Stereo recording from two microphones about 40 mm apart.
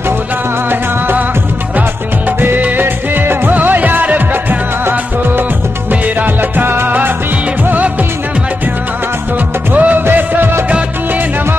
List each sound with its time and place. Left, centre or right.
2.8 s music: right
3.5 s music: right
6.5 s music: right
9.7 s music: right